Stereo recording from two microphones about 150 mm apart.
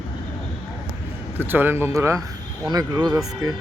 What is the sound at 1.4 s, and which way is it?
Speech, 15° right (ahead or behind).